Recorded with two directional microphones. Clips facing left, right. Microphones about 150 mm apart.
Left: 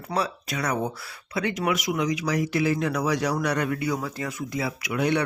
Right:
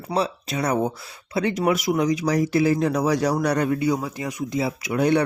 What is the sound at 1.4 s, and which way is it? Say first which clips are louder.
Speech: right 4 dB; 35° right (ahead or behind).